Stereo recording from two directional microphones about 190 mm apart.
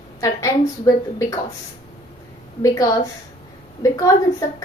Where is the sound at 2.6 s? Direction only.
20° left (ahead or behind).